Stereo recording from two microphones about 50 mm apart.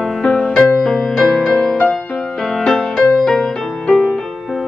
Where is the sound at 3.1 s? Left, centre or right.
Centre.